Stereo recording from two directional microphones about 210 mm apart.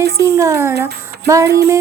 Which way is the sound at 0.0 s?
15° right (ahead or behind).